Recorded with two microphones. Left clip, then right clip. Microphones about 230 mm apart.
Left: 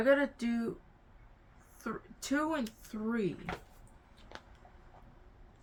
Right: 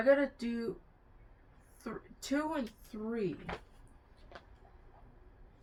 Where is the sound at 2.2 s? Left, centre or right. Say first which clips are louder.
Left 2 dB; centre.